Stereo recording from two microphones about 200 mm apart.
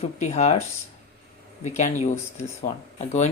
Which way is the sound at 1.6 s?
35° left (ahead or behind).